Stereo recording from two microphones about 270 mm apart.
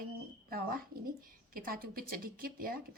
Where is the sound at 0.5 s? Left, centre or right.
Right.